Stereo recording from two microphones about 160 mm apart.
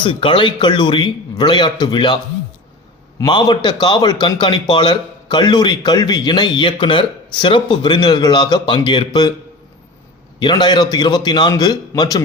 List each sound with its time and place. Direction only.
0.0 s speech: 30° left (ahead or behind)
3.2 s a man's voice: 25° left (ahead or behind)
10.4 s a man's voice: 30° left (ahead or behind)